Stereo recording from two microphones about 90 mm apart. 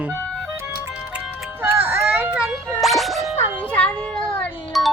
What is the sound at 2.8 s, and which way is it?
Music, centre (ahead or behind).